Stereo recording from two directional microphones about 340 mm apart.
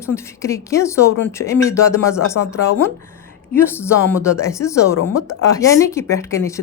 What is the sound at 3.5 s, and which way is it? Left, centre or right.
Speech, centre.